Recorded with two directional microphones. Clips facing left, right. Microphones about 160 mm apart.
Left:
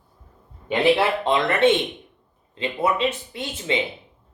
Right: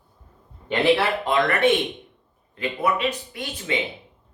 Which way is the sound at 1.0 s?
25° left (ahead or behind).